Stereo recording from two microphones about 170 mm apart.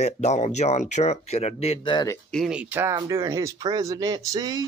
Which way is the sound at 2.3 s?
5° right (ahead or behind).